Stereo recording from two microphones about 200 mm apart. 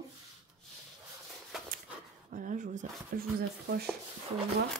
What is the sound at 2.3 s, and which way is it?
Speech, 40° right (ahead or behind).